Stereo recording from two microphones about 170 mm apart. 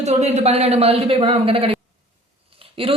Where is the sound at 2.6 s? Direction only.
35° right (ahead or behind).